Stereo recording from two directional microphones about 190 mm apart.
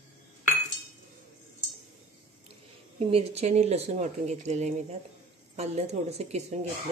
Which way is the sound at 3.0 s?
30° right (ahead or behind).